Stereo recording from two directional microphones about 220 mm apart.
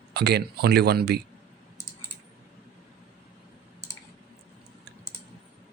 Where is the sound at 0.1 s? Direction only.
50° right (ahead or behind).